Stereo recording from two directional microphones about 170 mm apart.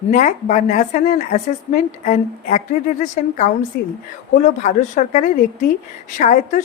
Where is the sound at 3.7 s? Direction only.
60° left (ahead or behind).